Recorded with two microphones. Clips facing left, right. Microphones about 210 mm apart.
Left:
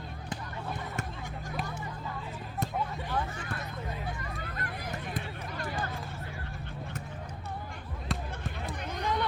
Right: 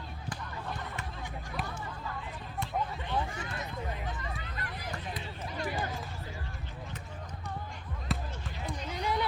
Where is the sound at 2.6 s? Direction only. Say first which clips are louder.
Left 3 dB; 40° left (ahead or behind).